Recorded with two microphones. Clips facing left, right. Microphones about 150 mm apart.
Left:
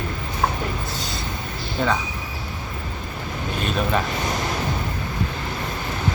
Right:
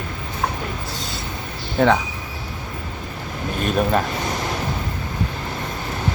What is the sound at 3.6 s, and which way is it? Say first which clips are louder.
Speech: right 4 dB; 45° right (ahead or behind).